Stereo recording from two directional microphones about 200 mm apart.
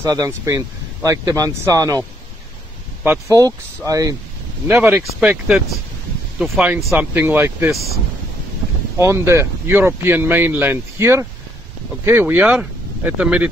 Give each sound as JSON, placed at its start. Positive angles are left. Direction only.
{"t": 0.0, "sound": "speech", "side_deg": -20}
{"t": 8.9, "sound": "speech", "side_deg": -15}